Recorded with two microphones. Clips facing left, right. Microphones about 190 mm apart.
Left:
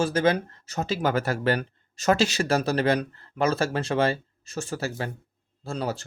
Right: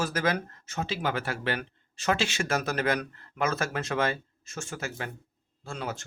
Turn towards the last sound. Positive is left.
turn(degrees=35)  # may be behind; listen again after turning